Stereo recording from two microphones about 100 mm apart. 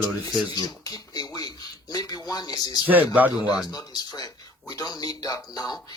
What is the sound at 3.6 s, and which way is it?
Speech, 40° left (ahead or behind).